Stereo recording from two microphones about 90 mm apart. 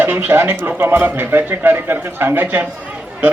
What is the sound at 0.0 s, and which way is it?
A man's voice, 25° right (ahead or behind).